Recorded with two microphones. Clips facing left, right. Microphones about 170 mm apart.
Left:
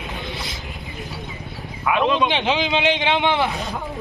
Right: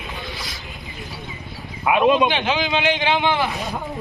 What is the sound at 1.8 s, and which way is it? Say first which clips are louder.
Speech: right 3 dB; 15° right (ahead or behind).